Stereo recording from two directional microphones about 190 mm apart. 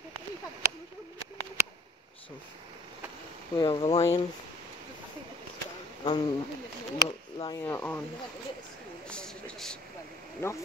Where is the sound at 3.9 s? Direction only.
35° left (ahead or behind).